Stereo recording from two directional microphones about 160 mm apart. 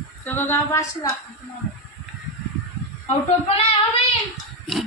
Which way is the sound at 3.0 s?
40° left (ahead or behind).